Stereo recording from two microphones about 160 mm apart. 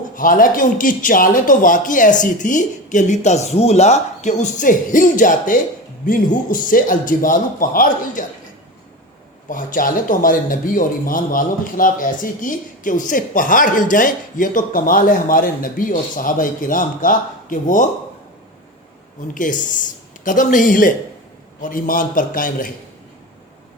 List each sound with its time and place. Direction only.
0.2 s speech: 60° left (ahead or behind)
9.5 s speech: 55° left (ahead or behind)
19.3 s speech: 55° left (ahead or behind)